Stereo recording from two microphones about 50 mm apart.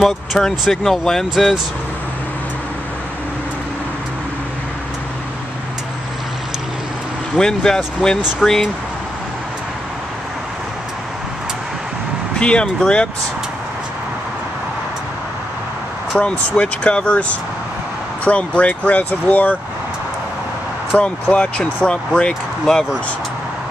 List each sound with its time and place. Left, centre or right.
0.4 s speech: centre
1.3 s speech: centre
7.3 s speech: centre
8.4 s speech: centre
12.4 s speech: left
16.2 s speech: left
21.0 s speech: left